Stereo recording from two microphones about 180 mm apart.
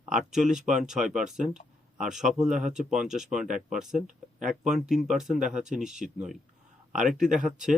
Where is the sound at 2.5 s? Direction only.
45° right (ahead or behind).